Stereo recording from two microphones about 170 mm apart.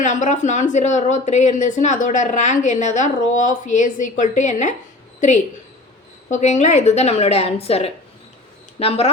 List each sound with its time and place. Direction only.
0.0 s speech: 45° left (ahead or behind)
6.3 s a woman's voice: 45° left (ahead or behind)